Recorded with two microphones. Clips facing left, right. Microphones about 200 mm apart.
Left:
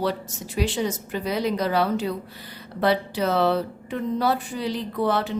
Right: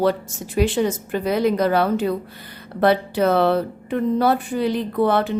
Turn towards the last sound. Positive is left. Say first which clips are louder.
# right 5 dB
turn(degrees=-55)  # may be behind; listen again after turning